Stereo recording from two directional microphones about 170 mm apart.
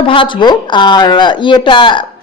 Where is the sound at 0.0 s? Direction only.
30° left (ahead or behind).